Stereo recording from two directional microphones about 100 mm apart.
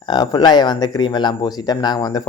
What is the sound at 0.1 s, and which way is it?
Speech, 45° left (ahead or behind).